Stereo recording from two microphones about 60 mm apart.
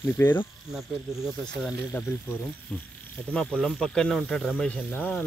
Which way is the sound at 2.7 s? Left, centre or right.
Left.